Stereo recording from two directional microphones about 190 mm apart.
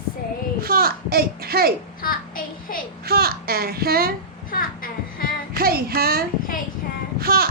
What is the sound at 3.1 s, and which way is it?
Speech, 55° right (ahead or behind).